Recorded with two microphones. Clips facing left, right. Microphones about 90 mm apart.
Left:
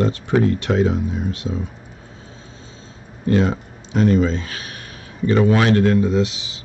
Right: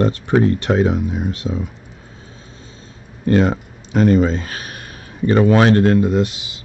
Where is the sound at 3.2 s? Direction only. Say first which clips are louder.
Right 3 dB; 55° right (ahead or behind).